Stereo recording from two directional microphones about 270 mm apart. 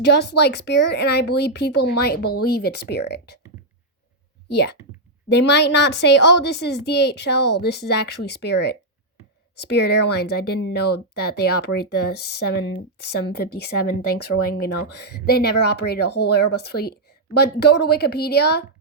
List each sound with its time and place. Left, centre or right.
0.0 s a woman's voice: left
4.4 s a woman's voice: left
9.6 s a woman's voice: left
14.1 s speech: left
14.6 s a woman's voice: left